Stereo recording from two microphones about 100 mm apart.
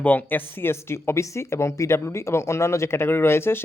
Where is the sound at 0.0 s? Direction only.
20° left (ahead or behind).